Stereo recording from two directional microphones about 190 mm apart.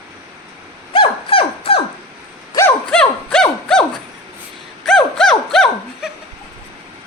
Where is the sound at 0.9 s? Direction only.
25° left (ahead or behind).